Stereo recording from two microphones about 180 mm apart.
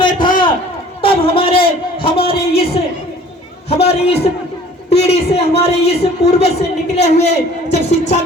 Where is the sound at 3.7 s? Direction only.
35° left (ahead or behind).